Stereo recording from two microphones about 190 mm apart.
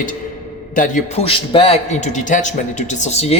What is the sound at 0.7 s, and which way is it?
Speech, 45° left (ahead or behind).